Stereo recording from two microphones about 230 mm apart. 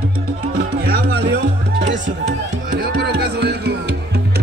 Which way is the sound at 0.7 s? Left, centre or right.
Right.